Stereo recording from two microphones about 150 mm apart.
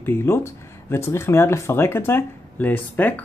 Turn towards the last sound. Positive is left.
turn(degrees=10)  # may be behind; listen again after turning